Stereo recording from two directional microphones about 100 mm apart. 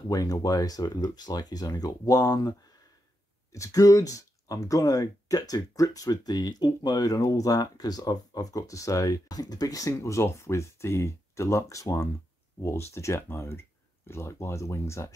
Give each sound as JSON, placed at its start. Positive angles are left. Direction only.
{"t": 0.1, "sound": "speech", "side_deg": 35}
{"t": 3.5, "sound": "speech", "side_deg": 35}